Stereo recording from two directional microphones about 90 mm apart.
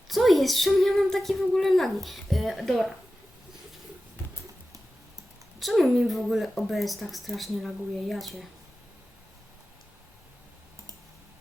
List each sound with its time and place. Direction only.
0.1 s speech: centre (ahead or behind)
5.5 s speech: centre (ahead or behind)